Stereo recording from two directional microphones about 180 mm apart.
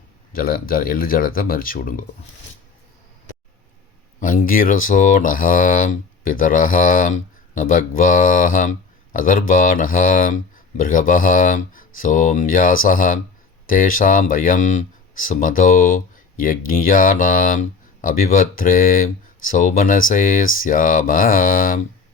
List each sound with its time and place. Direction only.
0.3 s speech: 55° left (ahead or behind)
4.2 s speech: 50° left (ahead or behind)